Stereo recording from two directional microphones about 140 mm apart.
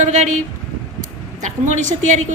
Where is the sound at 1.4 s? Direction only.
60° right (ahead or behind).